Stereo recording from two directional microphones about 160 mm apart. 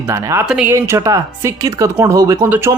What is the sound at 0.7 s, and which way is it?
Speech, 15° right (ahead or behind).